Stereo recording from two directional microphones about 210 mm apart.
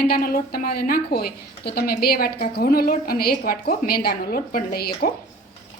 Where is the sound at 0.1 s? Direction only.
45° left (ahead or behind).